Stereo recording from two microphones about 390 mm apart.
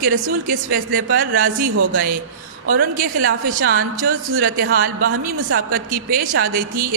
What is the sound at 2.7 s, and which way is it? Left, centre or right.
A woman's voice, right.